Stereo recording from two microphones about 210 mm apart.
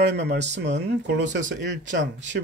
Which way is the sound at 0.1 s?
55° right (ahead or behind).